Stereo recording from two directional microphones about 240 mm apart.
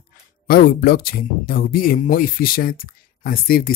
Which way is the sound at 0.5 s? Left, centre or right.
Left.